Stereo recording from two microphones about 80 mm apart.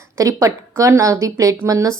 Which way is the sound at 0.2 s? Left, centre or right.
Right.